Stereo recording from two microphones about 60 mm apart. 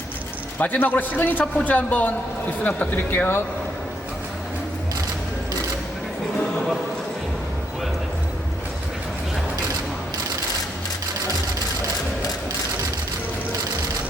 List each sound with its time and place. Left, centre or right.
0.6 s a man's voice: left